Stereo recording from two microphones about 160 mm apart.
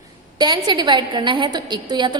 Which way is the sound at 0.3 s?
25° right (ahead or behind).